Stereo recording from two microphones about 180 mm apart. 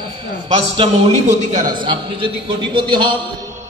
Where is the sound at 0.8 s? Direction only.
35° right (ahead or behind).